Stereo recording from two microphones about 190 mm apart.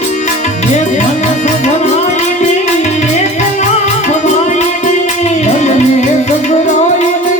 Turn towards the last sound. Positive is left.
turn(degrees=35)  # may be behind; listen again after turning